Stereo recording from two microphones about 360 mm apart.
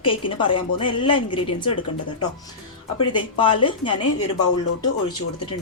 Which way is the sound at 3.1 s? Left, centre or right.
Centre.